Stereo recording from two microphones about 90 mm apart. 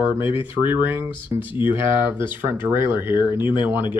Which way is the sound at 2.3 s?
25° right (ahead or behind).